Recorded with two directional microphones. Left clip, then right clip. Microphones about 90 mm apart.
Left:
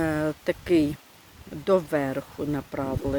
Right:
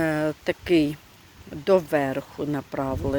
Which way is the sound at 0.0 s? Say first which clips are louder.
Right 2 dB; 10° left (ahead or behind).